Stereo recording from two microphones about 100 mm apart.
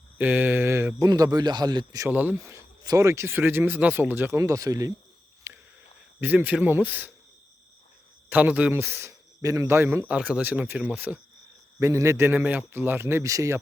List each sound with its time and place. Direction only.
0.2 s speech: 20° right (ahead or behind)
1.0 s a man's voice: 40° right (ahead or behind)
2.0 s speech: 15° right (ahead or behind)
2.3 s speech: 30° right (ahead or behind)
4.4 s a man's voice: 35° right (ahead or behind)
5.5 s a sound: 25° right (ahead or behind)
6.1 s speech: 20° right (ahead or behind)
8.3 s speech: 15° right (ahead or behind)
10.1 s speech: 10° right (ahead or behind)
11.8 s speech: 30° right (ahead or behind)